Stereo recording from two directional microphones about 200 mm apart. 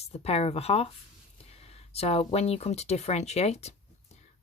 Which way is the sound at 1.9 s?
30° left (ahead or behind).